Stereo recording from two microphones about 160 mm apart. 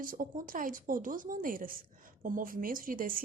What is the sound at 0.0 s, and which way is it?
Speech, 60° right (ahead or behind).